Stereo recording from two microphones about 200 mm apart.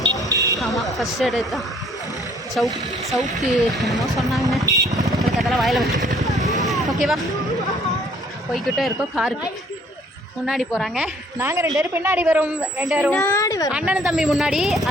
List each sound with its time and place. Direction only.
0.3 s buzzer: 15° right (ahead or behind)
0.6 s speech: centre (ahead or behind)
4.6 s vehicle: 15° right (ahead or behind)
5.0 s vehicle: centre (ahead or behind)
8.5 s speech: centre (ahead or behind)
10.4 s speech: centre (ahead or behind)
11.3 s a woman's voice: 15° right (ahead or behind)
13.2 s a sound: 15° left (ahead or behind)
13.7 s speech: 5° right (ahead or behind)